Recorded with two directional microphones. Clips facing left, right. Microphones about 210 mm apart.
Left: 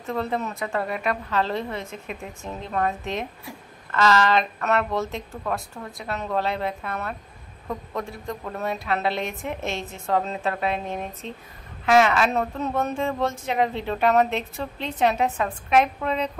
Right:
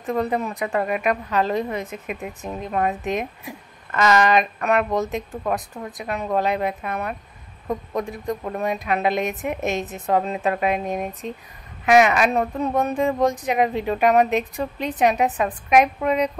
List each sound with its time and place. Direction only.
0.0 s a woman's voice: 15° right (ahead or behind)